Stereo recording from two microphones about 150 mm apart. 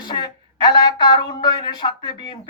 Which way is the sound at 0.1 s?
30° left (ahead or behind).